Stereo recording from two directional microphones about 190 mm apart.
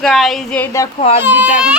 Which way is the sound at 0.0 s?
Centre (ahead or behind).